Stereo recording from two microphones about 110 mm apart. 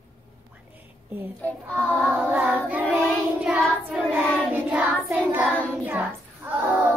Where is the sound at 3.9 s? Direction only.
15° right (ahead or behind).